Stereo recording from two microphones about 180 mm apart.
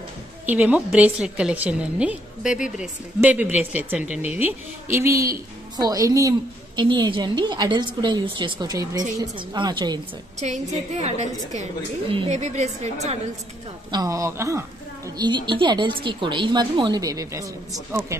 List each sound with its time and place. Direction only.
0.5 s a woman's voice: 10° right (ahead or behind); by 9.9 s 25° right (ahead or behind)
10.4 s a woman's voice: 40° right (ahead or behind)
13.9 s a woman's voice: 15° right (ahead or behind)